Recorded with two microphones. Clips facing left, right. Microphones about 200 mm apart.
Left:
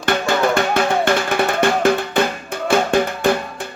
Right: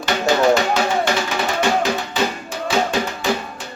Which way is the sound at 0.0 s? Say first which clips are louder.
Right 1 dB; 55° left (ahead or behind).